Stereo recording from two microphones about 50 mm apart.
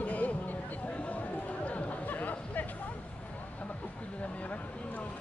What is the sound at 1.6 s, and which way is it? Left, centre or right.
Chatter, left.